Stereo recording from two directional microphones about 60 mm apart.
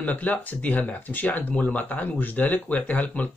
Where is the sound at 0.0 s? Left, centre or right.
Left.